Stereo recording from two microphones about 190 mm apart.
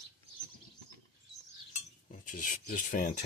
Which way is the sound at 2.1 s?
45° left (ahead or behind).